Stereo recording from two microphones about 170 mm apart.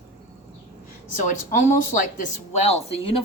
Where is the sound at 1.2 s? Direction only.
50° left (ahead or behind).